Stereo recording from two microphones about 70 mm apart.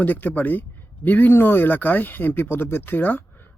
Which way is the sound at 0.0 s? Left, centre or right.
Left.